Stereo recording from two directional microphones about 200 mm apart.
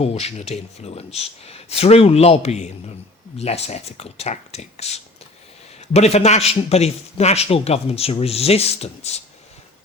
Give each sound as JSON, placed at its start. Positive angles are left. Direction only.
{"t": 0.0, "sound": "a man's voice", "side_deg": 30}